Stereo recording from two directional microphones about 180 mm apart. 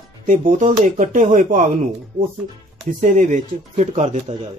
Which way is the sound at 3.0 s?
45° right (ahead or behind).